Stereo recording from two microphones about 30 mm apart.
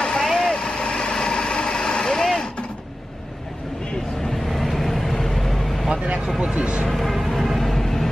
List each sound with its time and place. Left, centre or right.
0.0 s vehicle: left
4.5 s vehicle: centre
6.4 s a sound: right
6.9 s music: centre